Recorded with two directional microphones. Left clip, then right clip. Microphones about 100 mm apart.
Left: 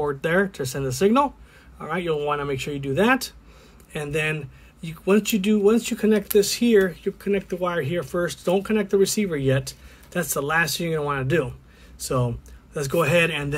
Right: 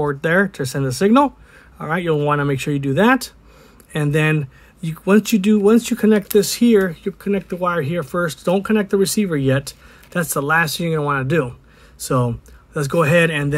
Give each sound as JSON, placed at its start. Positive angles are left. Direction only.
{"t": 0.0, "sound": "speech", "side_deg": -30}
{"t": 12.0, "sound": "speech", "side_deg": -45}